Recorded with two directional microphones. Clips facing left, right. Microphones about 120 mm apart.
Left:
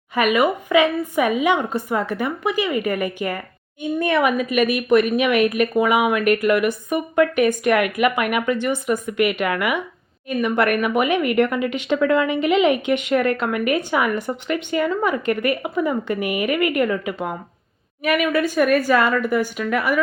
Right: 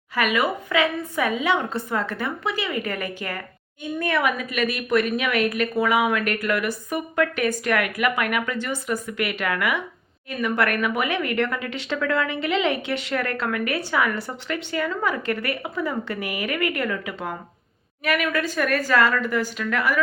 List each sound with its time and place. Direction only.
0.1 s a woman's voice: 20° left (ahead or behind)